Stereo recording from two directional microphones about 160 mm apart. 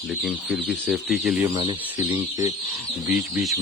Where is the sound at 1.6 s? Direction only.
25° right (ahead or behind).